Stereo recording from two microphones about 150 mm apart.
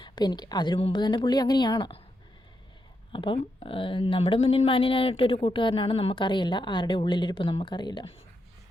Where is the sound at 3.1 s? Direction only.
35° left (ahead or behind).